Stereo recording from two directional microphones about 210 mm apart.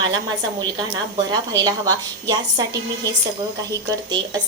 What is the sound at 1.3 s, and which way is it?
A woman's voice, 20° right (ahead or behind).